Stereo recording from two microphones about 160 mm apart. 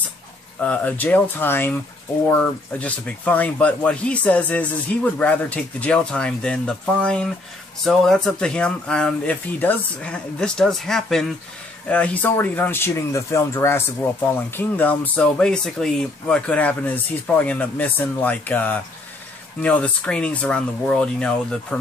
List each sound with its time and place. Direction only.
0.6 s speech: 10° left (ahead or behind)